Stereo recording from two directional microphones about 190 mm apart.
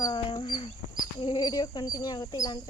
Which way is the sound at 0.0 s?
25° left (ahead or behind).